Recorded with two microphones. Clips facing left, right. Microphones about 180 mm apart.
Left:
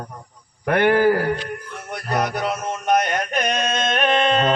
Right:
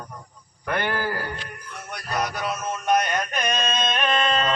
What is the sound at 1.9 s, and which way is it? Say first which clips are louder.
Music: left 5 dB; 60° left (ahead or behind).